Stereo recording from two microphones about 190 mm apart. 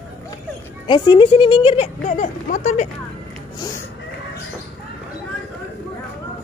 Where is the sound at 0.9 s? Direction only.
25° left (ahead or behind); by 2.8 s 40° left (ahead or behind).